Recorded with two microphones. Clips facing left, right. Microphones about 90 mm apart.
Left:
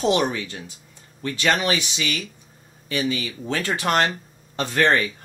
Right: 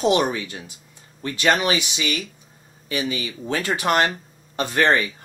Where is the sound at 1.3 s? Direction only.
15° right (ahead or behind).